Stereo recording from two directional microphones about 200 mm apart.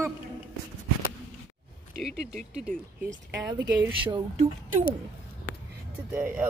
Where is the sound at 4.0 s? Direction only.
25° right (ahead or behind).